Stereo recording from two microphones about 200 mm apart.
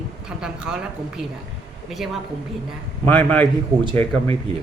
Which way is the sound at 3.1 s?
5° left (ahead or behind).